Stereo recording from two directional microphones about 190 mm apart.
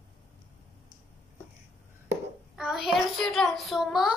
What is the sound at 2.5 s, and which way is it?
A child's voice, centre (ahead or behind).